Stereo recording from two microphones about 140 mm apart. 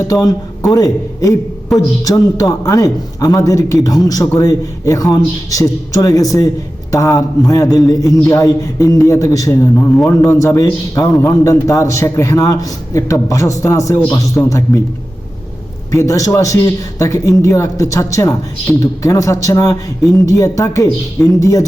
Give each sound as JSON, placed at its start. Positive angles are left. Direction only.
{"t": 0.1, "sound": "a man's voice", "side_deg": 25}
{"t": 1.7, "sound": "a man's voice", "side_deg": 0}
{"t": 2.0, "sound": "a man's voice", "side_deg": 25}
{"t": 15.9, "sound": "a man's voice", "side_deg": 20}